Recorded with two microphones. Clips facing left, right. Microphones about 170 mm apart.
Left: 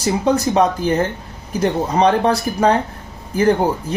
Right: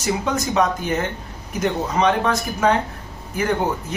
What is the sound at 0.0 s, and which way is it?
Speech, 35° left (ahead or behind).